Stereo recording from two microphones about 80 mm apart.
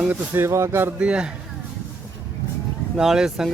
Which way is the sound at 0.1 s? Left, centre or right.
Right.